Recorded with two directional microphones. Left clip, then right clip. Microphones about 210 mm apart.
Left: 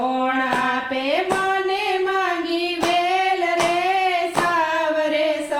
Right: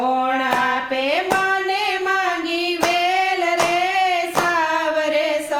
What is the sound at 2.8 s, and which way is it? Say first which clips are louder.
Singing: right 1 dB; 40° right (ahead or behind).